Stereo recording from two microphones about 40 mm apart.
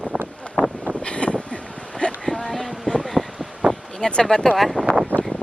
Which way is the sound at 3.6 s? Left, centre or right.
Right.